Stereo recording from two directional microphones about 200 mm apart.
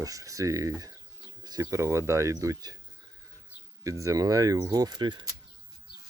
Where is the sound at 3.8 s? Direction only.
15° right (ahead or behind).